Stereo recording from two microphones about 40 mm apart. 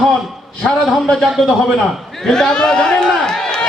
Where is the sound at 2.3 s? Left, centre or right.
Left.